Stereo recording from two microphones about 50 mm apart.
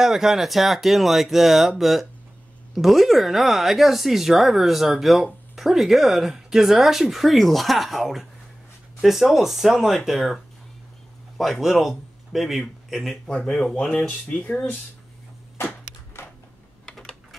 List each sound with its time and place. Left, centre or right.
0.0 s speech: centre
13.5 s speech: centre
14.0 s speech: left
16.1 s a sound: left
16.8 s typing: centre